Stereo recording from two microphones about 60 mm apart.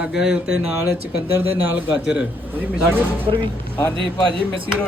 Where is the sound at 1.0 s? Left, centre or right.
Right.